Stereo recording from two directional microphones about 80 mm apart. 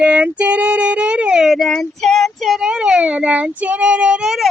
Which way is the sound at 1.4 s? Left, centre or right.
Centre.